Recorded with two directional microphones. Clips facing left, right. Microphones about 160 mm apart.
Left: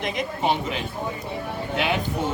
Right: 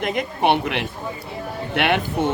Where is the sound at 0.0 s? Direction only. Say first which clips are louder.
Right 4 dB; 55° right (ahead or behind).